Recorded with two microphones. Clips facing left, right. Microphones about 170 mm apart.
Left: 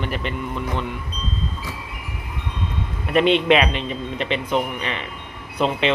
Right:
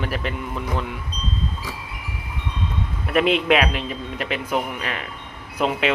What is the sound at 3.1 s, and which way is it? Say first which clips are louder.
A man's voice: left 2 dB; 5° right (ahead or behind).